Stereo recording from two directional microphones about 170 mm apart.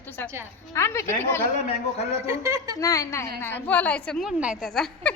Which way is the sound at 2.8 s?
20° left (ahead or behind).